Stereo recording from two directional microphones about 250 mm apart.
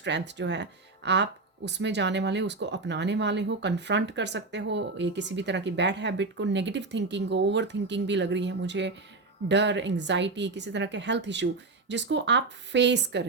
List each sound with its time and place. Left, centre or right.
0.0 s speech: right